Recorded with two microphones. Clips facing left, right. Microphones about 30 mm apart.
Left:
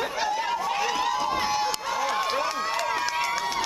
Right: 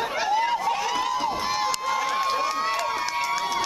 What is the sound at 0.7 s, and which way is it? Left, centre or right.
Run, centre.